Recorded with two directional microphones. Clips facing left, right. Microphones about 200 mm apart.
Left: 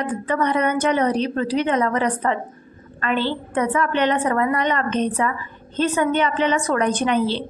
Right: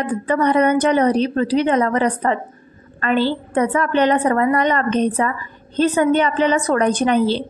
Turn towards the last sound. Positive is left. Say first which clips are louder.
# right 4 dB
turn(degrees=-40)  # may be behind; listen again after turning